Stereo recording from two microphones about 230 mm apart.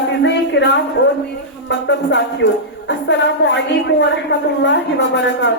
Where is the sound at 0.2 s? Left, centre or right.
Left.